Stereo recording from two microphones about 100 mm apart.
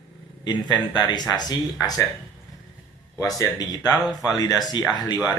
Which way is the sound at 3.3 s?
40° left (ahead or behind).